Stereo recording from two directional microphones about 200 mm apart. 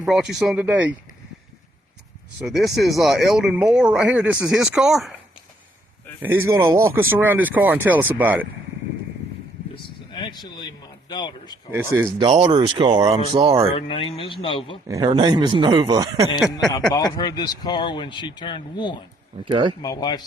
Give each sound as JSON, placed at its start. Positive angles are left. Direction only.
{"t": 0.0, "sound": "speech", "side_deg": -5}
{"t": 2.4, "sound": "speech", "side_deg": 0}
{"t": 6.2, "sound": "speech", "side_deg": -10}
{"t": 10.1, "sound": "a man's voice", "side_deg": 25}
{"t": 11.7, "sound": "speech", "side_deg": -10}
{"t": 12.2, "sound": "speech", "side_deg": -25}
{"t": 13.7, "sound": "speech", "side_deg": 25}
{"t": 14.8, "sound": "speech", "side_deg": -20}
{"t": 16.4, "sound": "speech", "side_deg": 0}
{"t": 16.9, "sound": "speech", "side_deg": 20}
{"t": 19.5, "sound": "speech", "side_deg": -25}
{"t": 19.8, "sound": "speech", "side_deg": 20}